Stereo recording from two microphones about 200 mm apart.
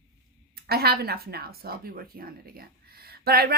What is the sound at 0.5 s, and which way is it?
Speech, 50° right (ahead or behind).